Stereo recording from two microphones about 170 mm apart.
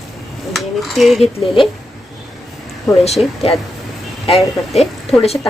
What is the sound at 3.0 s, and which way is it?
Speech, 40° left (ahead or behind).